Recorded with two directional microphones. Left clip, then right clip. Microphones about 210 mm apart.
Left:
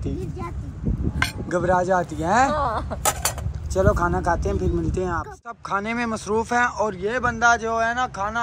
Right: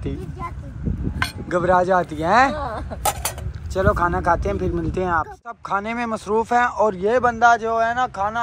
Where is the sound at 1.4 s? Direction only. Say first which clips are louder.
Right 4 dB; 10° left (ahead or behind).